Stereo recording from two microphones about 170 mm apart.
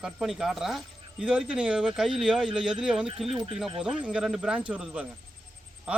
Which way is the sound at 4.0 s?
5° right (ahead or behind).